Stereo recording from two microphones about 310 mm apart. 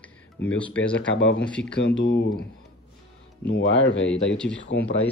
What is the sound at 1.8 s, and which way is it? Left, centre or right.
Speech, left.